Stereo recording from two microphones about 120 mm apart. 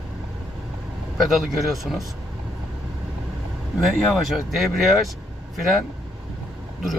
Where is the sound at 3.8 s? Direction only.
Centre (ahead or behind).